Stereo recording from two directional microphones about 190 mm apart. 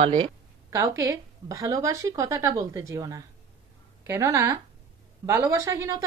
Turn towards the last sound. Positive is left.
turn(degrees=-15)  # may be behind; listen again after turning